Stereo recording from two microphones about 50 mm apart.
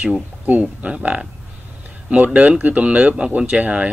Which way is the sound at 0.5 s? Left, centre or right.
Right.